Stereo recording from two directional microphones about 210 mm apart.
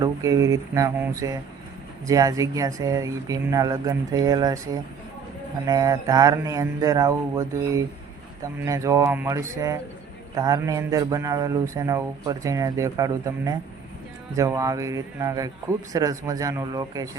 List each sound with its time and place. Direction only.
0.0 s speech: 15° right (ahead or behind)